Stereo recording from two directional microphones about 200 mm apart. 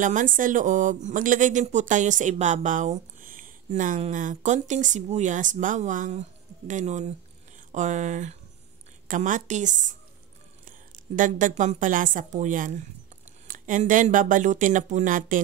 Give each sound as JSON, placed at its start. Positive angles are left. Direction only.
{"t": 0.0, "sound": "speech", "side_deg": -40}